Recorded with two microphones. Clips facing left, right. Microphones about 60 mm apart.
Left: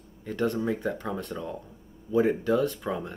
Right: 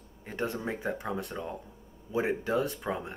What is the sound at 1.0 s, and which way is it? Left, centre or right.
Speech, centre.